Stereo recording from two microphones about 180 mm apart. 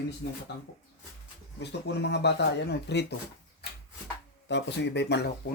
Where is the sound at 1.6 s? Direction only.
70° left (ahead or behind).